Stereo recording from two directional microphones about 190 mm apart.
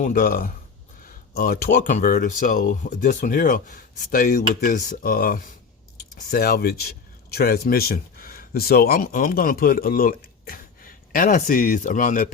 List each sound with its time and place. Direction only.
0.0 s speech: 45° left (ahead or behind)